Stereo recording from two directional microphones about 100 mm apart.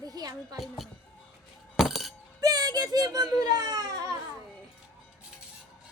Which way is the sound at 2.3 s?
40° right (ahead or behind).